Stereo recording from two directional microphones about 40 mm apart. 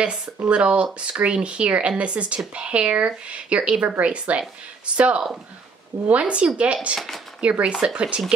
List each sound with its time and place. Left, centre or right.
0.0 s speech: right